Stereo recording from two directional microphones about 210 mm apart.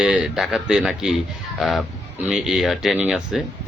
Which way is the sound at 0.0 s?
5° right (ahead or behind).